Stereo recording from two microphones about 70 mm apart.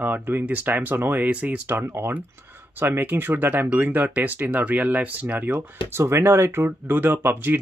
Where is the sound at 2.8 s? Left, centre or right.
Right.